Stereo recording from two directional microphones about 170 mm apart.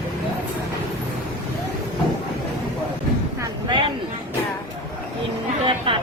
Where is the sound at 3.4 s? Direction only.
25° right (ahead or behind).